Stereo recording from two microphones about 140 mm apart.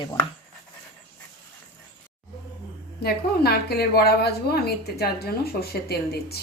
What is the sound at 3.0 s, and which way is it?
Speech, 90° left.